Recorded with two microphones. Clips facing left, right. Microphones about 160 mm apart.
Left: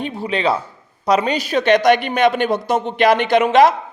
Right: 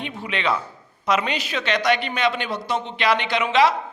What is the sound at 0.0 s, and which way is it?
A man's voice, 35° left (ahead or behind).